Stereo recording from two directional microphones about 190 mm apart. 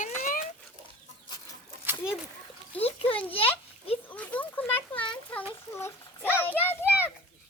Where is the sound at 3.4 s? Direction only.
30° left (ahead or behind).